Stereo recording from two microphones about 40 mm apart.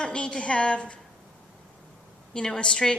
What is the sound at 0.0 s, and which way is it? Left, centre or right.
Speech, left.